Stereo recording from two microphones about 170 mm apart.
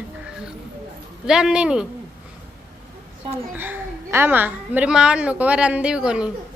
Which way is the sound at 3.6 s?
10° right (ahead or behind).